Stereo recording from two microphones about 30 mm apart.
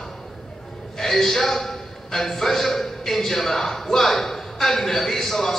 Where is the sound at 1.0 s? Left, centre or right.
Centre.